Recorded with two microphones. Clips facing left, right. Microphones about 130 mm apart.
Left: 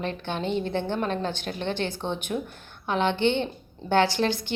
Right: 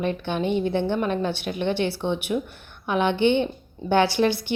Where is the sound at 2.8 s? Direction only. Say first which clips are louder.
Right 3 dB; 15° right (ahead or behind).